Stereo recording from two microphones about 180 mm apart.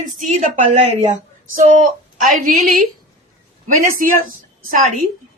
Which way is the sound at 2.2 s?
50° right (ahead or behind).